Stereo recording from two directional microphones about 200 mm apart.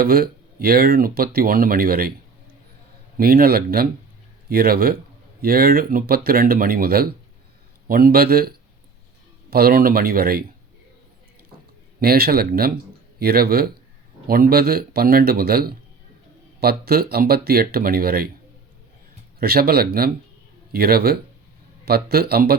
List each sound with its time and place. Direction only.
0.0 s speech: 50° right (ahead or behind)
3.2 s speech: 50° right (ahead or behind)
11.9 s speech: 50° right (ahead or behind)
19.4 s speech: 50° right (ahead or behind)